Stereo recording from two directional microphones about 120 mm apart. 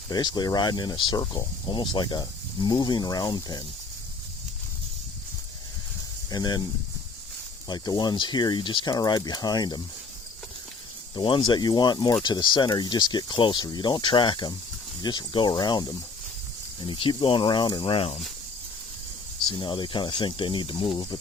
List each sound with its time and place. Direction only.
0.1 s speech: 35° left (ahead or behind)
6.3 s speech: 35° left (ahead or behind)
7.7 s speech: 35° left (ahead or behind)
11.1 s speech: 40° left (ahead or behind)
19.5 s speech: 40° left (ahead or behind)